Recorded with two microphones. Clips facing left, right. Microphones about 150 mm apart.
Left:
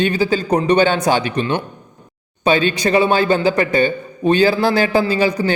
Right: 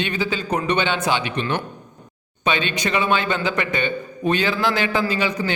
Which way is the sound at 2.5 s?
35° left (ahead or behind).